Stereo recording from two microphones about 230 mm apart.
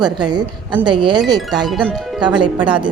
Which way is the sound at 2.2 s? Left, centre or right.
Centre.